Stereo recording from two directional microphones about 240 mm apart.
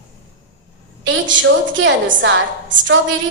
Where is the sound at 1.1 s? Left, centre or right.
Right.